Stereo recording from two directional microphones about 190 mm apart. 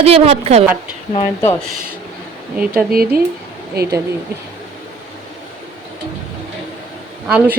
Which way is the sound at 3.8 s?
55° right (ahead or behind).